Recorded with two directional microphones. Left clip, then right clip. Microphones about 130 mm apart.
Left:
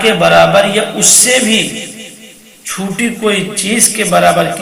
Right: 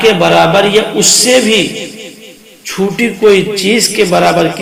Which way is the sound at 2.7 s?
60° right (ahead or behind).